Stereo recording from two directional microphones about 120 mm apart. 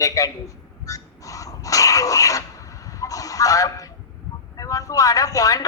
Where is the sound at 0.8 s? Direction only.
30° left (ahead or behind).